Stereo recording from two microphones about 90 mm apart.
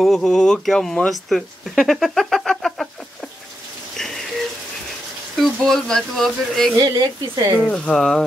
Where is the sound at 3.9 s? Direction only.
5° left (ahead or behind).